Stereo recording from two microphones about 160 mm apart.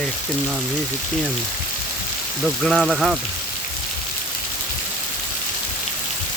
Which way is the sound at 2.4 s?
Centre (ahead or behind).